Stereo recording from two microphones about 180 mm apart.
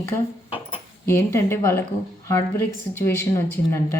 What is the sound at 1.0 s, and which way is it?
Speech, 15° left (ahead or behind).